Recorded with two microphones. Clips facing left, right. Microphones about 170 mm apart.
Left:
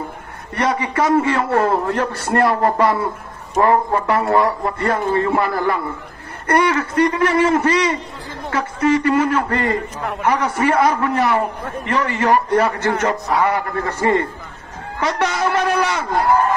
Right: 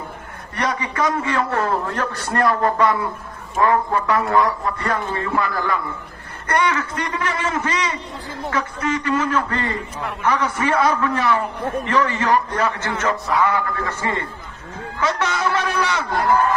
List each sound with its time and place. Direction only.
0.6 s a man's voice: 30° left (ahead or behind)